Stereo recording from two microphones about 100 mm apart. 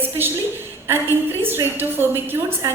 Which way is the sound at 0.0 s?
20° right (ahead or behind).